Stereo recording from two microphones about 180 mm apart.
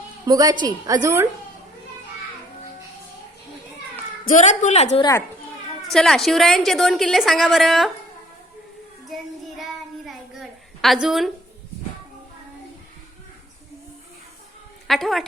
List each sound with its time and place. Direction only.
0.3 s a woman's voice: 20° right (ahead or behind)
4.3 s a woman's voice: 45° left (ahead or behind)
4.9 s a child's voice: 20° left (ahead or behind)
5.9 s a woman's voice: centre (ahead or behind)
9.0 s child singing: centre (ahead or behind)
10.1 s a sound: centre (ahead or behind)
14.8 s a woman's voice: centre (ahead or behind)